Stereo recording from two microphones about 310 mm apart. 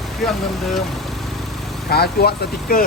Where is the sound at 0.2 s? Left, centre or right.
Centre.